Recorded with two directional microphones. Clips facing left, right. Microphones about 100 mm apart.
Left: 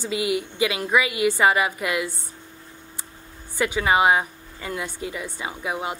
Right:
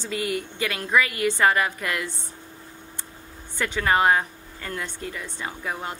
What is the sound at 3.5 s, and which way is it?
Speech, 10° left (ahead or behind).